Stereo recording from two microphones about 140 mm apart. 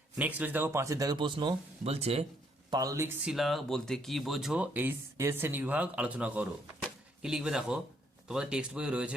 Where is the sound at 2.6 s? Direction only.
25° right (ahead or behind).